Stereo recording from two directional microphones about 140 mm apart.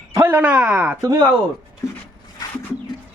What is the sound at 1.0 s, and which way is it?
Speech, 25° right (ahead or behind).